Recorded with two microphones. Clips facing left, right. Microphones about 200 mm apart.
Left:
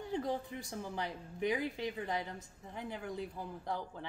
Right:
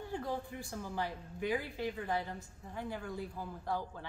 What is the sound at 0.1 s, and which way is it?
A woman's voice, 20° left (ahead or behind).